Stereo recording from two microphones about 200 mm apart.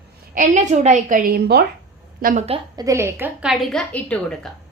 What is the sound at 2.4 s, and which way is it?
Speech, 30° right (ahead or behind).